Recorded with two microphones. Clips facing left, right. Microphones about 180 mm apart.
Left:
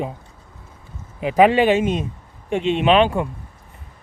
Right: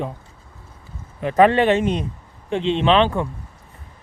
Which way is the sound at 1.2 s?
10° left (ahead or behind).